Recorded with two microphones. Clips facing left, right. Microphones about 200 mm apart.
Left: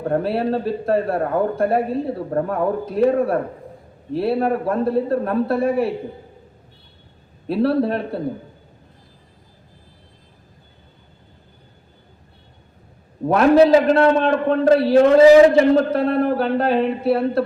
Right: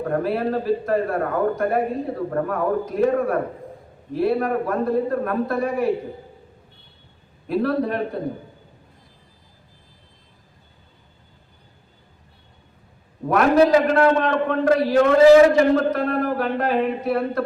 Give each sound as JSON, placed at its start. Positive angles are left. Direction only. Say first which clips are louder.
{"t": 0.1, "sound": "a man's voice", "louder": "left 3 dB", "side_deg": 30}
{"t": 7.4, "sound": "speech", "louder": "left 3 dB", "side_deg": 30}
{"t": 13.2, "sound": "speech", "louder": "left 3 dB", "side_deg": 30}